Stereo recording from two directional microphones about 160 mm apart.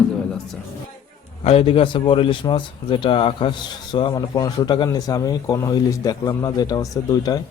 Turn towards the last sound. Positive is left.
turn(degrees=25)  # may be behind; listen again after turning